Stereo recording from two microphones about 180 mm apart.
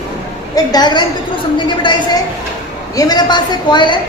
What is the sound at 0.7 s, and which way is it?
A woman's voice, 25° left (ahead or behind).